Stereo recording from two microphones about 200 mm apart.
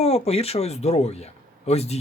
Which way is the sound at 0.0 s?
30° left (ahead or behind).